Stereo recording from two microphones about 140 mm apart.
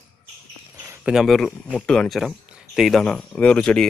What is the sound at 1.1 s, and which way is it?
Speech, centre (ahead or behind).